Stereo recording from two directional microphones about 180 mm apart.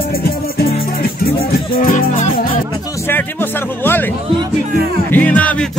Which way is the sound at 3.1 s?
10° left (ahead or behind).